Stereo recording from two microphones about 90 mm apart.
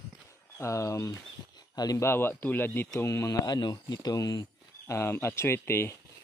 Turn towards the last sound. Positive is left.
turn(degrees=30)  # may be behind; listen again after turning